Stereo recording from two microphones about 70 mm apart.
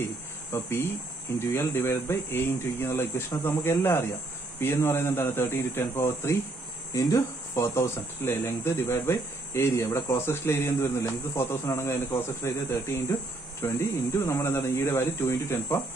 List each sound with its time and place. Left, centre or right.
0.0 s cricket: left
1.4 s speech: left
6.9 s speech: left